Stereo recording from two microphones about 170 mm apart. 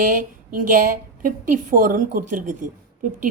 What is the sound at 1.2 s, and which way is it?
A woman's voice, 50° right (ahead or behind).